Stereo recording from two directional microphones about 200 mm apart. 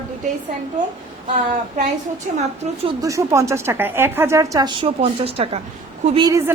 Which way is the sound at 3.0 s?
15° right (ahead or behind).